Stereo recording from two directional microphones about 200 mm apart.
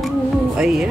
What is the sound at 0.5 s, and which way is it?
Speech, 5° right (ahead or behind).